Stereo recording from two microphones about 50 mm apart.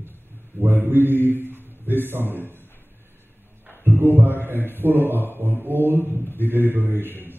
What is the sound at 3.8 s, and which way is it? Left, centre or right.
Music, right.